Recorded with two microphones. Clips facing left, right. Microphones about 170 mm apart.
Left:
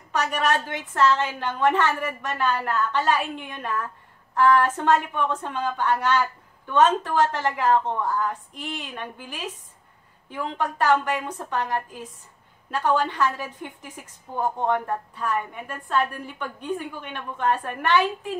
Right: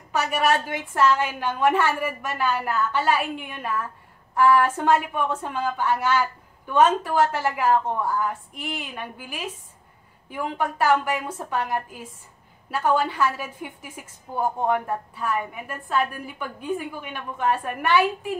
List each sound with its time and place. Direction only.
0.1 s a woman's voice: 10° right (ahead or behind)